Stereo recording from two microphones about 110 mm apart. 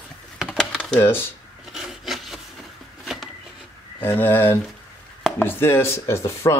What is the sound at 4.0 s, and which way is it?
Speech, 20° left (ahead or behind).